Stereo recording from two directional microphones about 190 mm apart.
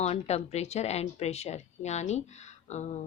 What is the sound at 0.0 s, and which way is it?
Speech, 35° left (ahead or behind).